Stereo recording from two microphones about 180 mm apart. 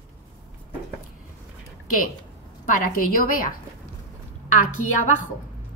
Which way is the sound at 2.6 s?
50° left (ahead or behind).